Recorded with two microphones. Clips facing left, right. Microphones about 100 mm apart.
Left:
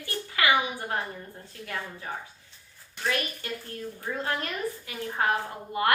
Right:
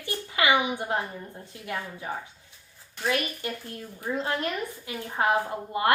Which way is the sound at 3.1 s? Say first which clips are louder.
Right 3 dB; 20° right (ahead or behind).